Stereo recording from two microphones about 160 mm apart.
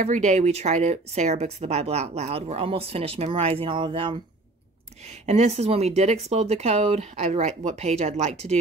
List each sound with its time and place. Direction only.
0.0 s speech: 50° right (ahead or behind); by 4.2 s 30° right (ahead or behind)
5.2 s speech: 45° right (ahead or behind)